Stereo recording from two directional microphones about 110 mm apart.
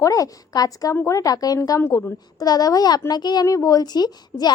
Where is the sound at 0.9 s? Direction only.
20° left (ahead or behind).